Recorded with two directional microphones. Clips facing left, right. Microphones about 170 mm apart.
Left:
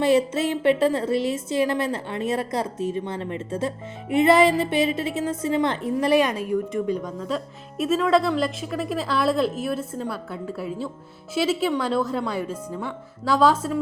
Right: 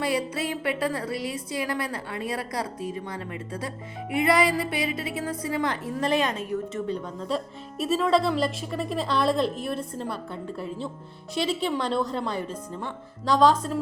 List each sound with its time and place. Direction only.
0.0 s a woman's voice: 25° left (ahead or behind)
7.3 s a woman's voice: centre (ahead or behind)